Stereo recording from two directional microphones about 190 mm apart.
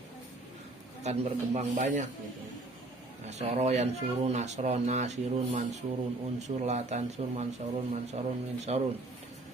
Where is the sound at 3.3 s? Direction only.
35° right (ahead or behind).